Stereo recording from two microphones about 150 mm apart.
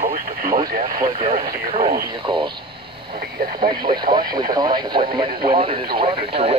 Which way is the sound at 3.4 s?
90° right.